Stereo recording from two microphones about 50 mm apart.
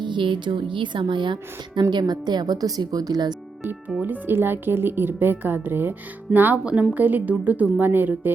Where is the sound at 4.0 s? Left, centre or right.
Right.